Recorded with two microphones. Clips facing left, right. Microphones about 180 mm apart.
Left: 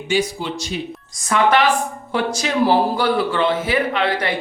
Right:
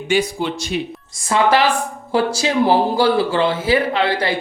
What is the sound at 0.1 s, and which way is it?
Speech, 60° right (ahead or behind).